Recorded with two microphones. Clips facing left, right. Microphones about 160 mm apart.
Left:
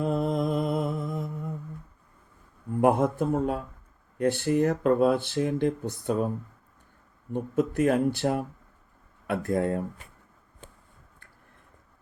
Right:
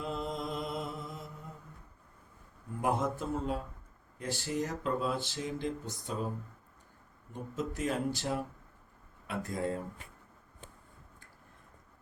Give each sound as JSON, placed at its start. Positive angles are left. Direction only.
{"t": 0.0, "sound": "mantra", "side_deg": 55}
{"t": 2.8, "sound": "speech", "side_deg": 55}
{"t": 7.3, "sound": "speech", "side_deg": 60}